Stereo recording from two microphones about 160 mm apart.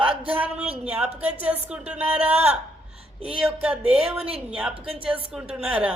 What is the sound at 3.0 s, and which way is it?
Speech, 35° right (ahead or behind).